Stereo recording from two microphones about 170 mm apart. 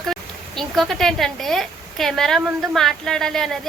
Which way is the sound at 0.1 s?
Centre (ahead or behind).